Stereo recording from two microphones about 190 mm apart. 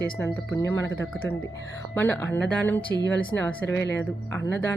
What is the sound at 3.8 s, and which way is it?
Speech, 65° left (ahead or behind).